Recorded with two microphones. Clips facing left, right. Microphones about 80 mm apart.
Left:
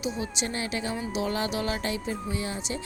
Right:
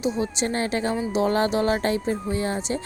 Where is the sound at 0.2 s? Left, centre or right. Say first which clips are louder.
Right 7 dB; right.